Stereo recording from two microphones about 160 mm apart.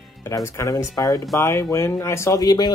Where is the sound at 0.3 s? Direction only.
20° left (ahead or behind).